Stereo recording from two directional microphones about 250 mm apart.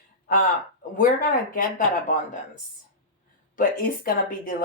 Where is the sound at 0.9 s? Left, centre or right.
Left.